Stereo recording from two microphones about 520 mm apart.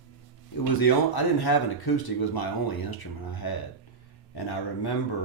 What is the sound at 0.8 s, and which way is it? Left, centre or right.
Speech, left.